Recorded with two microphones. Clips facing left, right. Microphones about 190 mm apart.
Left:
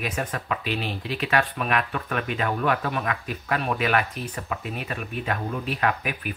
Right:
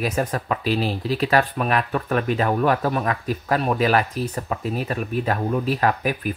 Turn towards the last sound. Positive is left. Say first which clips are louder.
# right 5 dB
turn(degrees=-35)  # may be behind; listen again after turning